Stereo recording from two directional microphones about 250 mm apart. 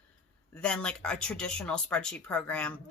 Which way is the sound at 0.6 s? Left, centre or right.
Centre.